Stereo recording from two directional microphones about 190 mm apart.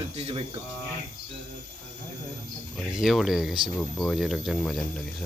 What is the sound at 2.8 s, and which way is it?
Speech, centre (ahead or behind).